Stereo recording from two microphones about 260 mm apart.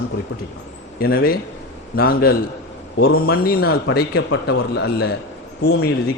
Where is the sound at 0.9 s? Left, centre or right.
Left.